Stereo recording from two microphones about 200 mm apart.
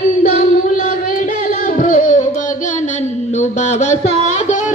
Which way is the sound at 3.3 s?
35° left (ahead or behind).